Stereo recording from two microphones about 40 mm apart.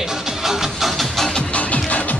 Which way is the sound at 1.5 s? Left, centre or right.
Left.